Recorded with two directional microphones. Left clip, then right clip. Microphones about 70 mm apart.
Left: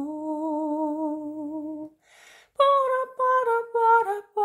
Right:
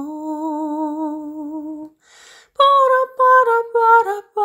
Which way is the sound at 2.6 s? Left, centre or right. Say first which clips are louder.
Right 8 dB; right.